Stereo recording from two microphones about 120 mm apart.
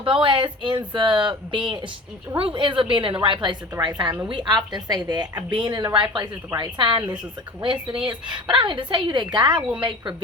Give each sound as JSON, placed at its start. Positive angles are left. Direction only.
{"t": 0.0, "sound": "a woman's voice", "side_deg": -45}
{"t": 9.6, "sound": "a woman's voice", "side_deg": -5}